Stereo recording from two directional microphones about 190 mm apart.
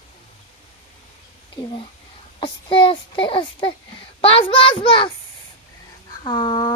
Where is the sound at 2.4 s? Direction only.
25° left (ahead or behind).